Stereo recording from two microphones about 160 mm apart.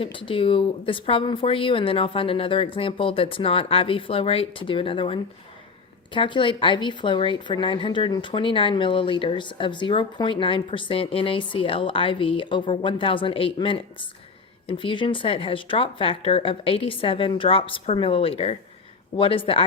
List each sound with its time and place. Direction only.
0.0 s a woman's voice: 35° left (ahead or behind)